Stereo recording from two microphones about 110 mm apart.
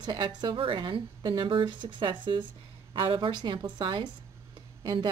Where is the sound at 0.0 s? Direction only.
40° right (ahead or behind).